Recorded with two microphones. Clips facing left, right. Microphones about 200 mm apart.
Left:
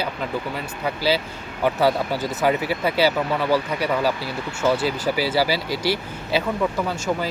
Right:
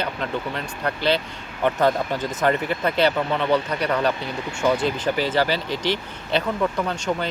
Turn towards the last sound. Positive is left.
turn(degrees=5)  # may be behind; listen again after turning